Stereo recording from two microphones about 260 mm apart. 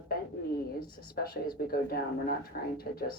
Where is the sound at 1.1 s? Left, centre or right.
Left.